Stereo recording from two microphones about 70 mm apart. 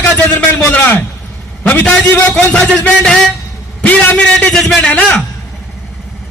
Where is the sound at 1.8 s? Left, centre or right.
Centre.